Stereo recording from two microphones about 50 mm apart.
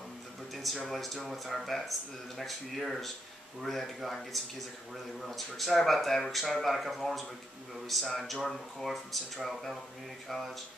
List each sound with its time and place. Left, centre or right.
0.8 s speech: centre